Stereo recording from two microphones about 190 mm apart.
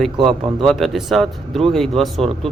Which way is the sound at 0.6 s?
Centre (ahead or behind).